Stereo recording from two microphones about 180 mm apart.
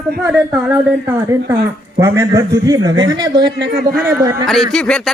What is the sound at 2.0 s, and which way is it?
A man's voice, 15° right (ahead or behind).